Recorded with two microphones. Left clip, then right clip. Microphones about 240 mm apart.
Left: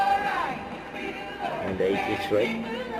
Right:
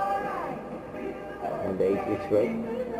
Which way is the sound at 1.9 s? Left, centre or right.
Centre.